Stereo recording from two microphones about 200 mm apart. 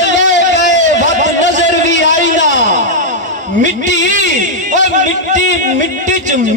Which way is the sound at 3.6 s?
40° right (ahead or behind).